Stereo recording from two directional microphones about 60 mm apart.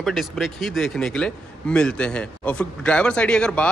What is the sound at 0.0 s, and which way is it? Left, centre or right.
Speech, centre.